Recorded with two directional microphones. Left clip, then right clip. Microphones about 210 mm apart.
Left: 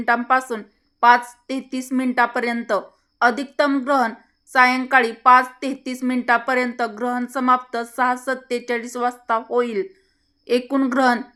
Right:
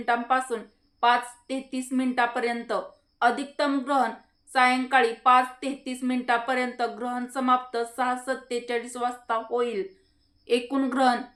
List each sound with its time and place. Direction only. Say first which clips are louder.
0.0 s a woman's voice: left 6 dB; 45° left (ahead or behind)